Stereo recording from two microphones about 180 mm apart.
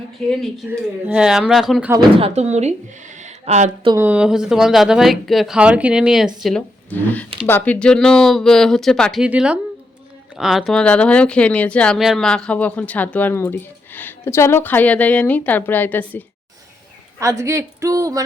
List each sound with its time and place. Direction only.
0.3 s speech: centre (ahead or behind)
2.1 s speech: 35° right (ahead or behind)
3.2 s a sound: 40° right (ahead or behind)
3.9 s speech: 10° right (ahead or behind)
6.9 s speech: 10° left (ahead or behind)
17.2 s speech: 15° right (ahead or behind)